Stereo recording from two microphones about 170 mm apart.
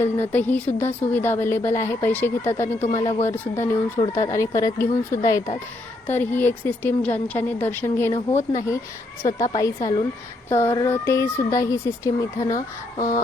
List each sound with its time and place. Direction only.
0.0 s a woman's voice: 10° left (ahead or behind)
2.9 s speech: 35° left (ahead or behind)
3.2 s a woman's voice: 15° left (ahead or behind)